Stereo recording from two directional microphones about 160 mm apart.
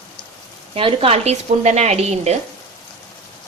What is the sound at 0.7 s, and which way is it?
Speech, 35° right (ahead or behind).